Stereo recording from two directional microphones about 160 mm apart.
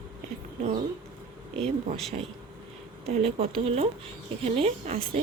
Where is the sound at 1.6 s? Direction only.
5° left (ahead or behind).